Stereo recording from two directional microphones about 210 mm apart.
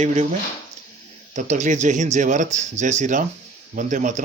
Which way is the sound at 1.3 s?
35° right (ahead or behind).